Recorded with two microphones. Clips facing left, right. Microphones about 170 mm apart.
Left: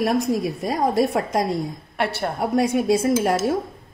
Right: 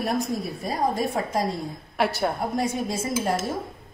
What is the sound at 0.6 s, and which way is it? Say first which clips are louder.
Speech: left 4 dB; 80° left.